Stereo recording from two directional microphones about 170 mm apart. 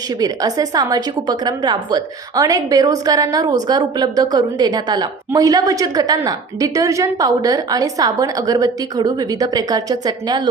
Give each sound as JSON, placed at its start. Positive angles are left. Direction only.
{"t": 0.2, "sound": "a woman's voice", "side_deg": -20}